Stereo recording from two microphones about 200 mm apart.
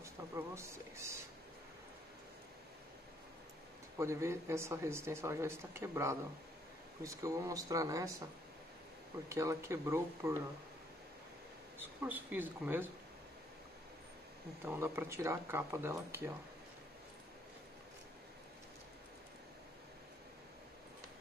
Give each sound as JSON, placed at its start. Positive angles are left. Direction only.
{"t": 0.0, "sound": "speech", "side_deg": -15}
{"t": 4.0, "sound": "speech", "side_deg": -15}
{"t": 9.3, "sound": "speech", "side_deg": -15}
{"t": 12.0, "sound": "speech", "side_deg": -10}
{"t": 14.6, "sound": "speech", "side_deg": -10}